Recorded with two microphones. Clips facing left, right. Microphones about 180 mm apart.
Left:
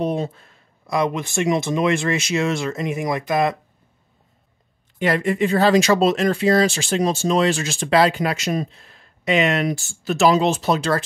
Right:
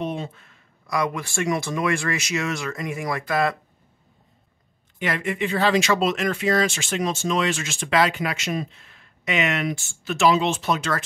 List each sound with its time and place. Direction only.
0.0 s speech: 40° left (ahead or behind); by 3.5 s 20° left (ahead or behind)
4.9 s speech: 35° left (ahead or behind)